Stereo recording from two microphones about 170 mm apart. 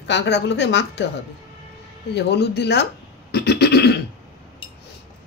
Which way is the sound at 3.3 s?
75° left (ahead or behind).